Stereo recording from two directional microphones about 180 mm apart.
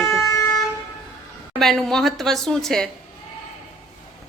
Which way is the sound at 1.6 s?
Centre (ahead or behind).